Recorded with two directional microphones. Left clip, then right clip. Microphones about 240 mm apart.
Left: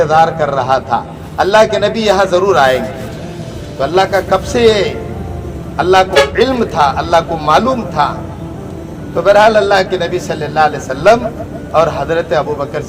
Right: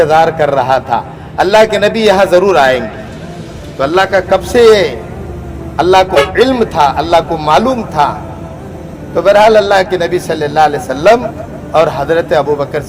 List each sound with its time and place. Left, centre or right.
0.0 s a man's voice: right
9.1 s a man's voice: right